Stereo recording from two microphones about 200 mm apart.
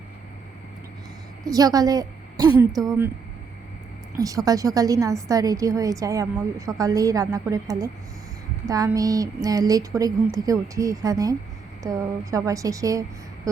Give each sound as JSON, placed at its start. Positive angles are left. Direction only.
{"t": 1.5, "sound": "a woman's voice", "side_deg": -20}
{"t": 4.2, "sound": "a woman's voice", "side_deg": -15}